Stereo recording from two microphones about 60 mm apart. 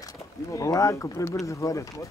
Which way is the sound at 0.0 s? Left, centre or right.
Left.